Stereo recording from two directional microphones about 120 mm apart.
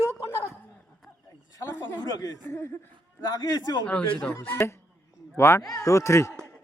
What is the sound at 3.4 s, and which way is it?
Speech, 35° left (ahead or behind).